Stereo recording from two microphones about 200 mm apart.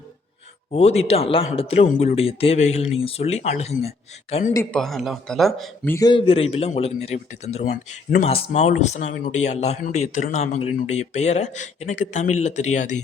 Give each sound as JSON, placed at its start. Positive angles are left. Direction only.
{"t": 0.7, "sound": "speech", "side_deg": 30}
{"t": 4.7, "sound": "speech", "side_deg": 0}
{"t": 5.9, "sound": "speech", "side_deg": 20}